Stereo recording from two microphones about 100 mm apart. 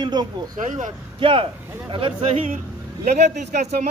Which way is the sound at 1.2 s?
60° right (ahead or behind).